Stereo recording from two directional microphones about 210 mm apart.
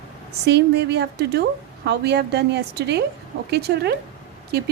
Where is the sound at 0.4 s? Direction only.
55° right (ahead or behind).